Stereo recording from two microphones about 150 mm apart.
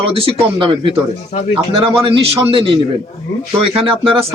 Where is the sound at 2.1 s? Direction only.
40° right (ahead or behind).